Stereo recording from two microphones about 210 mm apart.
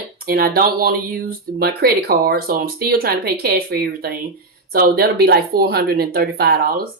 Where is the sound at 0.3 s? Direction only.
45° right (ahead or behind).